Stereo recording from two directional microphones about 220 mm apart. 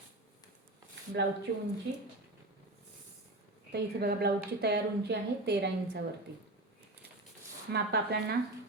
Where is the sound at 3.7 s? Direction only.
45° right (ahead or behind).